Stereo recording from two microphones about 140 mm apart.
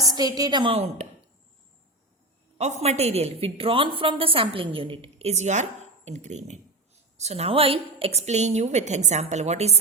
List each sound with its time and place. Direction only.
0.0 s a sound: 30° right (ahead or behind)
0.3 s a woman's voice: 30° right (ahead or behind)
2.6 s a woman's voice: 55° right (ahead or behind)